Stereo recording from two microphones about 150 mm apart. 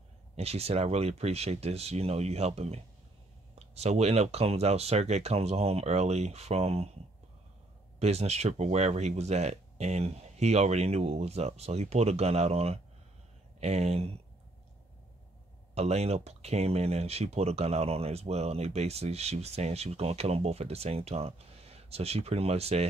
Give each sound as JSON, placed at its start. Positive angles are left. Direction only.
{"t": 0.4, "sound": "speech", "side_deg": -45}
{"t": 8.0, "sound": "speech", "side_deg": -45}
{"t": 15.7, "sound": "speech", "side_deg": -45}